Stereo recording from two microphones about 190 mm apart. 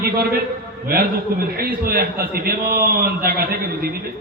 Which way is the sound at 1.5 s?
50° right (ahead or behind).